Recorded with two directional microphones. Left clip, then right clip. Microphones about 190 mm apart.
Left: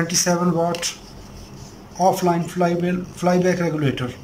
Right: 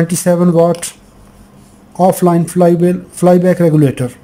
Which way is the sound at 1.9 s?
30° right (ahead or behind).